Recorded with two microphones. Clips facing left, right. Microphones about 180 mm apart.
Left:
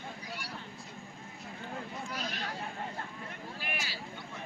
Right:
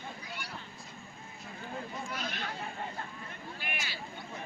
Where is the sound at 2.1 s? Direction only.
35° left (ahead or behind).